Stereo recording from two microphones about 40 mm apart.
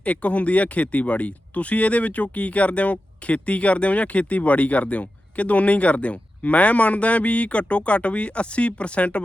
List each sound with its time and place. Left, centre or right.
0.0 s speech: left